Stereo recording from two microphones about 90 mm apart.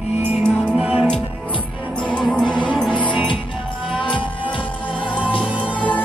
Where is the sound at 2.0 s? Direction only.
10° left (ahead or behind).